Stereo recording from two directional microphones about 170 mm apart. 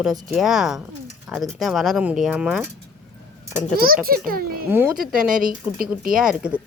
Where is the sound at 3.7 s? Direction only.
60° right (ahead or behind).